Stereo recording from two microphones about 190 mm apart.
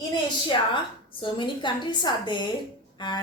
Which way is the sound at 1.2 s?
25° left (ahead or behind).